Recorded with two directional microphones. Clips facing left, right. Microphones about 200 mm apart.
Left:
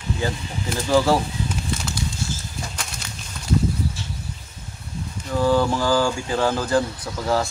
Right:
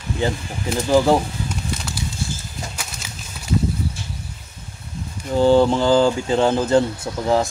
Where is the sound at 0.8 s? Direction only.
15° right (ahead or behind).